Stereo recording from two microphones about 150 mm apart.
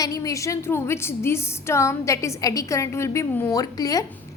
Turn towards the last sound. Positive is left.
turn(degrees=25)  # may be behind; listen again after turning